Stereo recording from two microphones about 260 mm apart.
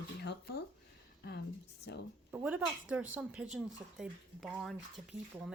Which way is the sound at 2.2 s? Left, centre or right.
Centre.